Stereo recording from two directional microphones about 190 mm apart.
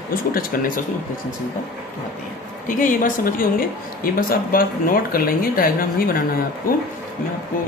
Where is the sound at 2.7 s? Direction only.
45° left (ahead or behind).